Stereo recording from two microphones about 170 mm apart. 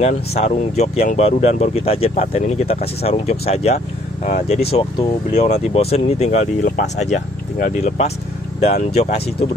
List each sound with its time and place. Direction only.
0.0 s speech: 40° left (ahead or behind)